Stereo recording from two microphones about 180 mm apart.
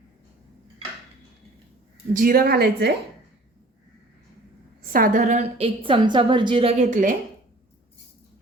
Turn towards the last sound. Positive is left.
turn(degrees=-45)  # may be behind; listen again after turning